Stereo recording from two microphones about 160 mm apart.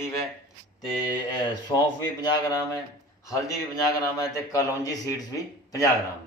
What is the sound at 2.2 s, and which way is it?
A man's voice, 25° left (ahead or behind).